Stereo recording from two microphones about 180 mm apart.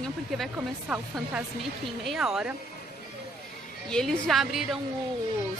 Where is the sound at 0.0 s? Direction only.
Centre (ahead or behind).